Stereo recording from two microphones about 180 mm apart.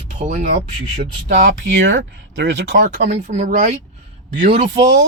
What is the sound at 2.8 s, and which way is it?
Speech, 45° right (ahead or behind).